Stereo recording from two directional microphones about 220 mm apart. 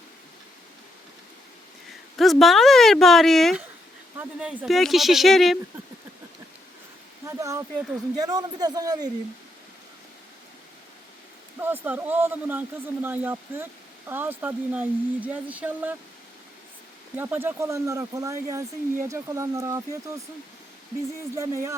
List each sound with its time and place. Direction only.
2.1 s speech: centre (ahead or behind)
7.3 s speech: 15° right (ahead or behind)
11.6 s speech: 10° right (ahead or behind)
17.2 s speech: 10° right (ahead or behind)
21.3 s speech: 15° right (ahead or behind)